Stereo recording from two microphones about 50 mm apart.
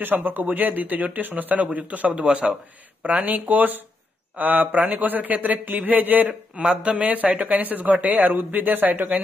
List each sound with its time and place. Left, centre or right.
0.0 s a man's voice: right
2.2 s a man's voice: centre
3.0 s a man's voice: right
6.5 s a man's voice: right